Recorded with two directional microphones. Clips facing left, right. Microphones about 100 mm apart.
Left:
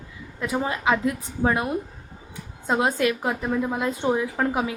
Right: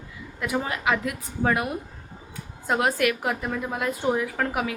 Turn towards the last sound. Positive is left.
turn(degrees=20)  # may be behind; listen again after turning